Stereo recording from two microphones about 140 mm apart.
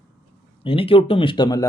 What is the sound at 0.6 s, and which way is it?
Speech, 40° left (ahead or behind).